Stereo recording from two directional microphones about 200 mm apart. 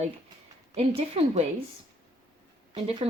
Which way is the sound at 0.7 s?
30° right (ahead or behind).